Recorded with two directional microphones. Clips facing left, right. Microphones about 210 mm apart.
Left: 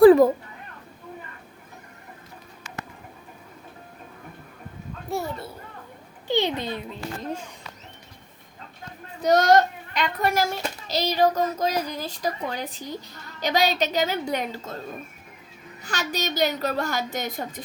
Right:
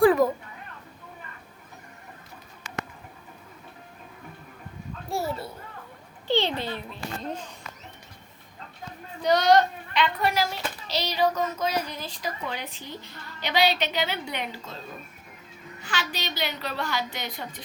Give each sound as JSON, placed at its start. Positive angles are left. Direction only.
{"t": 0.0, "sound": "a sound", "side_deg": 30}
{"t": 5.1, "sound": "a child's voice", "side_deg": 0}
{"t": 6.2, "sound": "a child's voice", "side_deg": 15}
{"t": 9.2, "sound": "a child's voice", "side_deg": 45}
{"t": 15.8, "sound": "a child's voice", "side_deg": 40}